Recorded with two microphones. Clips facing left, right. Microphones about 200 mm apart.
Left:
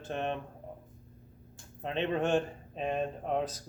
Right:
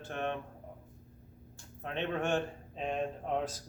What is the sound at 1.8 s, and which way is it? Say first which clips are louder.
A man's voice: left 4 dB; 15° left (ahead or behind).